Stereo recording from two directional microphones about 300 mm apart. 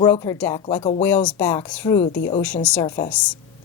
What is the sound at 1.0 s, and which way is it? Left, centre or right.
A woman's voice, centre.